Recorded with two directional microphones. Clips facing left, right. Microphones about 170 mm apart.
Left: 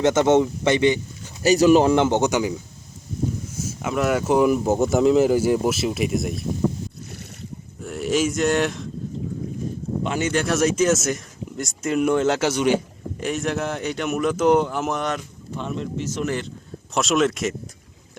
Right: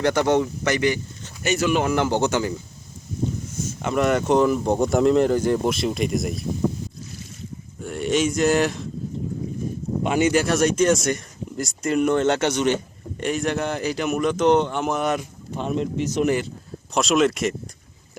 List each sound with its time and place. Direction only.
0.0 s speech: 20° left (ahead or behind)
1.4 s speech: 35° left (ahead or behind); by 2.6 s 15° left (ahead or behind)
3.6 s speech: 5° left (ahead or behind)
7.8 s speech: centre (ahead or behind)
10.0 s speech: 15° right (ahead or behind)
10.4 s speech: centre (ahead or behind)
16.9 s speech: centre (ahead or behind)